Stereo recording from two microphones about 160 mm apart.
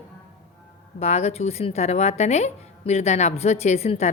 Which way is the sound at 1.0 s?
40° left (ahead or behind).